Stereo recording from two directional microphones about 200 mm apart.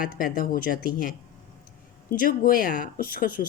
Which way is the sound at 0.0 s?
45° left (ahead or behind).